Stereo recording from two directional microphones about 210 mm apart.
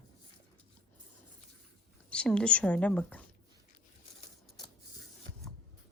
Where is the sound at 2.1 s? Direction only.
5° left (ahead or behind).